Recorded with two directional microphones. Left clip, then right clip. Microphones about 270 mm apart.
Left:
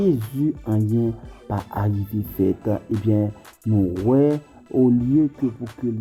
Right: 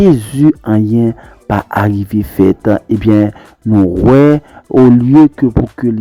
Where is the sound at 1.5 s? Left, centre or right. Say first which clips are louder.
Right 14 dB; right.